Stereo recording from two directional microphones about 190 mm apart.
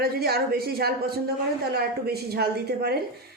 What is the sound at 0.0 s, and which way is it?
Speech, 55° right (ahead or behind).